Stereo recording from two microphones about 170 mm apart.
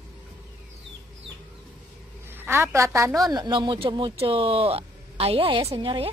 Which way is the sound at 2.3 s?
15° right (ahead or behind).